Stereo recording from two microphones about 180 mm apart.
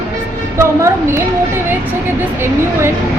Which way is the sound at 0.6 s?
15° right (ahead or behind).